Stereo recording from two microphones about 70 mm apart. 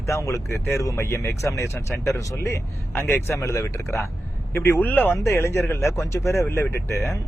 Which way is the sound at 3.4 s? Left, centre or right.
Left.